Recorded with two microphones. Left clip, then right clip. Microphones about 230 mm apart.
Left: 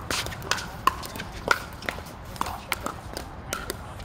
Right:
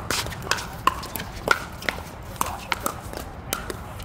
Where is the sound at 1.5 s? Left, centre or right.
Right.